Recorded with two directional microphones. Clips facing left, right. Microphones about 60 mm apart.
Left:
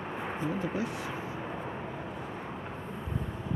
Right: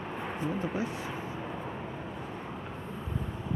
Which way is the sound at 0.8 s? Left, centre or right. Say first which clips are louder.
Even; right.